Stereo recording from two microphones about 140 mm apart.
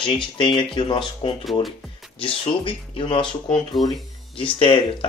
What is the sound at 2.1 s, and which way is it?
Speech, 40° left (ahead or behind).